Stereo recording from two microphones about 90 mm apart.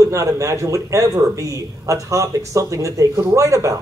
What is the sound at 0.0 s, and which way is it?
Speech, 35° right (ahead or behind).